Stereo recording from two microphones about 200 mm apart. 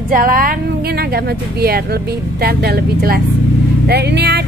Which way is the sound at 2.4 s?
50° right (ahead or behind).